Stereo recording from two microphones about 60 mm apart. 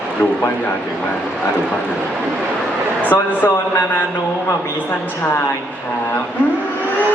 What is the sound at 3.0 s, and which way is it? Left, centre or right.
Speech, left.